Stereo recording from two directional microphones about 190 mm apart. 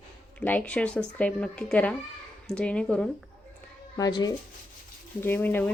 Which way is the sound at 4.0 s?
20° left (ahead or behind).